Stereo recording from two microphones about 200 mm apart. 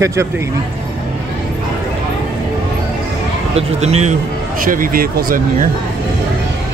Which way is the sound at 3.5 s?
30° right (ahead or behind).